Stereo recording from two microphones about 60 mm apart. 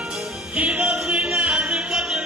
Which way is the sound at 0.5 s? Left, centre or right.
Right.